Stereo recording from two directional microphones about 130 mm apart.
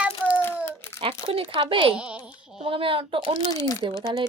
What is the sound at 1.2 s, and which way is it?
Speech, 45° right (ahead or behind).